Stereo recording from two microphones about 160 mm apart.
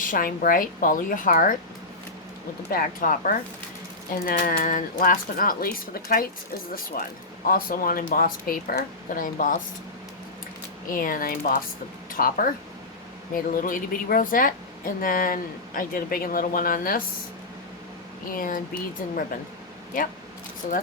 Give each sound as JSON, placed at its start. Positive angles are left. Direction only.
{"t": 0.0, "sound": "a woman's voice", "side_deg": 60}
{"t": 2.6, "sound": "a woman's voice", "side_deg": 65}
{"t": 10.8, "sound": "a woman's voice", "side_deg": 60}
{"t": 18.3, "sound": "a woman's voice", "side_deg": 60}
{"t": 19.9, "sound": "a woman's voice", "side_deg": 60}